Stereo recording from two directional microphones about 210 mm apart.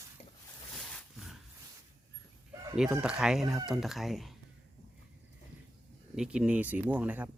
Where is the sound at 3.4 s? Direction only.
15° right (ahead or behind).